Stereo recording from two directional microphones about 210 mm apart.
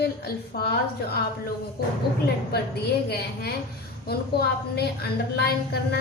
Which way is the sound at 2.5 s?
50° left (ahead or behind).